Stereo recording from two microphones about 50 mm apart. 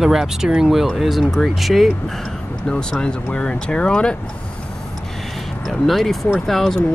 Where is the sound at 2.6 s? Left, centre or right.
Centre.